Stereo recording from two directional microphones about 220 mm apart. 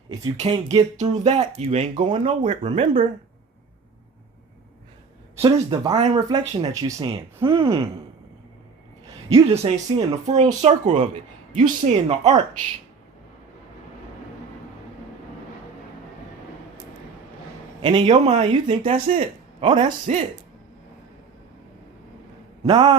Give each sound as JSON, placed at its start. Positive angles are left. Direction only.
{"t": 0.3, "sound": "speech", "side_deg": -30}
{"t": 5.4, "sound": "speech", "side_deg": -20}
{"t": 5.9, "sound": "speech", "side_deg": -30}
{"t": 6.1, "sound": "speech", "side_deg": -15}
{"t": 9.5, "sound": "speech", "side_deg": -30}
{"t": 17.8, "sound": "speech", "side_deg": -20}
{"t": 18.3, "sound": "speech", "side_deg": -35}
{"t": 22.6, "sound": "speech", "side_deg": -20}